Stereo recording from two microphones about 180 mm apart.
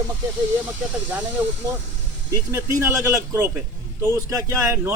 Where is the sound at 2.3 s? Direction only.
15° right (ahead or behind).